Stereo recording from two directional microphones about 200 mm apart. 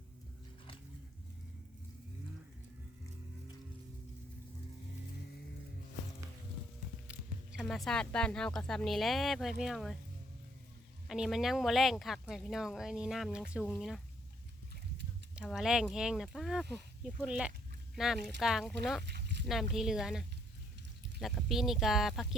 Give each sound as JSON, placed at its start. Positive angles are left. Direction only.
{"t": 7.1, "sound": "speech", "side_deg": 0}
{"t": 11.1, "sound": "speech", "side_deg": 0}
{"t": 15.4, "sound": "speech", "side_deg": 0}
{"t": 19.0, "sound": "a sound", "side_deg": -60}
{"t": 19.5, "sound": "speech", "side_deg": 0}